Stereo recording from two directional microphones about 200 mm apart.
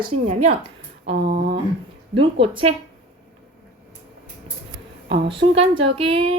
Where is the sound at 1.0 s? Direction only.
55° right (ahead or behind).